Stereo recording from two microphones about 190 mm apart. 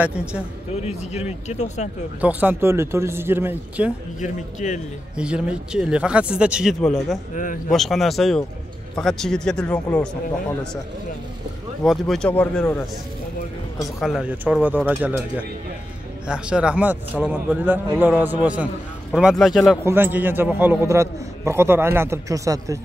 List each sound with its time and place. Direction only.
0.0 s speech: 5° right (ahead or behind)
0.7 s speech: 35° left (ahead or behind)
2.2 s a man's voice: 10° right (ahead or behind)
4.2 s speech: 40° left (ahead or behind)
5.1 s speech: 5° right (ahead or behind)
7.3 s a man's voice: 45° left (ahead or behind)
7.7 s speech: centre (ahead or behind)
11.8 s speech: centre (ahead or behind)
13.9 s a man's voice: centre (ahead or behind)
19.8 s a man's voice: 10° right (ahead or behind)